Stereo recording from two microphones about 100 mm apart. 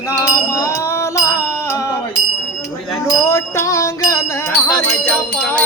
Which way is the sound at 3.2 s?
30° left (ahead or behind).